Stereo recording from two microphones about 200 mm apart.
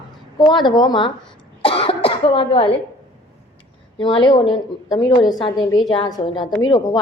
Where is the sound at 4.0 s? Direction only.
25° left (ahead or behind).